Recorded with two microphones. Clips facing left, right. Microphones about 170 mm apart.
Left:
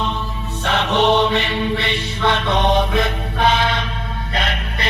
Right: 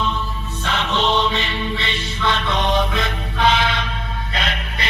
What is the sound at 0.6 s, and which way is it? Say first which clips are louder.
Music: left 4 dB; 65° left (ahead or behind).